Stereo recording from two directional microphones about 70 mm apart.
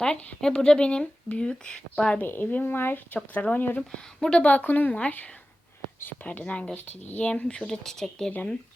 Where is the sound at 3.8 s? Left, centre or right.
Centre.